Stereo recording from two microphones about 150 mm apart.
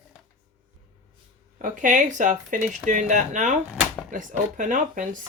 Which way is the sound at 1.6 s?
60° right (ahead or behind).